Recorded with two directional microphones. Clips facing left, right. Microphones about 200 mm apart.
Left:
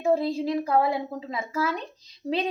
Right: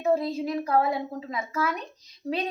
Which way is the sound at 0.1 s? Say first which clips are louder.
Left 2 dB; 30° left (ahead or behind).